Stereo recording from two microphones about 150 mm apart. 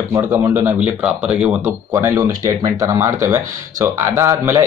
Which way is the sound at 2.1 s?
25° right (ahead or behind).